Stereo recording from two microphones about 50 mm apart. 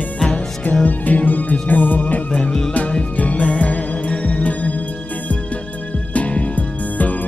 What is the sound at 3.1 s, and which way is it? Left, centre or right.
Music, left.